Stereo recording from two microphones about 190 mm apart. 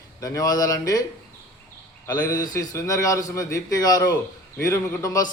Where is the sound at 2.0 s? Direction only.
20° left (ahead or behind).